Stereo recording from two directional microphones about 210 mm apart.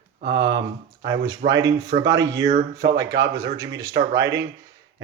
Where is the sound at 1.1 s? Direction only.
15° right (ahead or behind).